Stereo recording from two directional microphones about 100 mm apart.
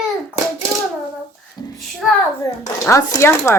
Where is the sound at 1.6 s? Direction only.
40° left (ahead or behind).